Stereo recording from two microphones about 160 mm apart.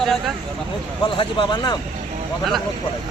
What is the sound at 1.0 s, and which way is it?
Speech, 30° left (ahead or behind).